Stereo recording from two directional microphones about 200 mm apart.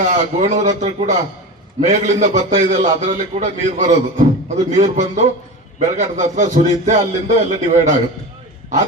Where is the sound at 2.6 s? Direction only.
35° right (ahead or behind).